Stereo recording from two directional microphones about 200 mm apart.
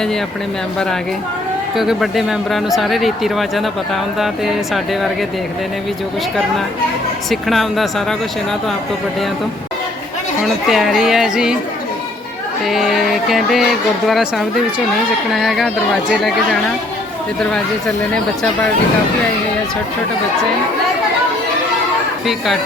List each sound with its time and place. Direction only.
1.7 s speech: centre (ahead or behind)
7.3 s speech: centre (ahead or behind)
10.4 s speech: centre (ahead or behind)
12.6 s speech: centre (ahead or behind)